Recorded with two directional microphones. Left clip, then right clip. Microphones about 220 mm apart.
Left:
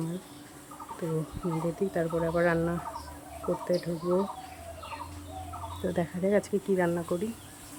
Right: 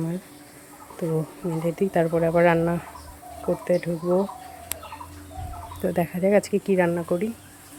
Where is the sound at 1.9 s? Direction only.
20° right (ahead or behind).